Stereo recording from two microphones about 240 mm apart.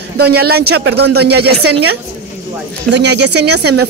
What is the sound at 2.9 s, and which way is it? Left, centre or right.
Speech, right.